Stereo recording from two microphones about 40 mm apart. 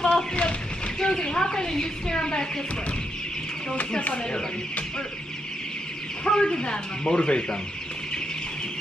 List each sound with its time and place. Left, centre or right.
0.1 s a sound: left
4.0 s speech: left
6.2 s speech: centre